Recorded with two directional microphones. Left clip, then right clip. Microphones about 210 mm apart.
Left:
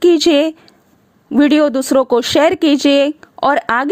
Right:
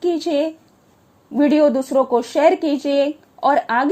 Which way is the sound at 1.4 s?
35° left (ahead or behind).